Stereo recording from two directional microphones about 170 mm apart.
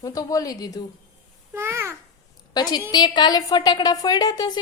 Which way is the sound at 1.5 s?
15° right (ahead or behind).